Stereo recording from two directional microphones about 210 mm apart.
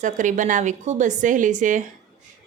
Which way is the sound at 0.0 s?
35° right (ahead or behind).